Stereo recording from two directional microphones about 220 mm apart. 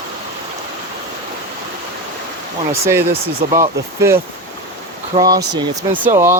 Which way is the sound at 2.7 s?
10° right (ahead or behind).